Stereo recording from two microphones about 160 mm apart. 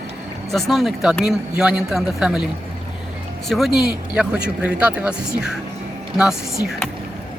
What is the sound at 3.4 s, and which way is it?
A man's voice, centre (ahead or behind).